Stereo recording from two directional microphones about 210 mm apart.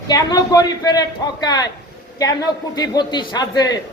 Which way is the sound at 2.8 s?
20° left (ahead or behind).